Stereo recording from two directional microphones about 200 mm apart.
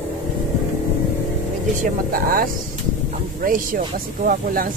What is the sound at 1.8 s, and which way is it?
Speech, 45° right (ahead or behind).